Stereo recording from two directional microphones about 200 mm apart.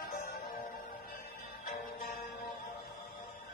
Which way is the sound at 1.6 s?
40° left (ahead or behind).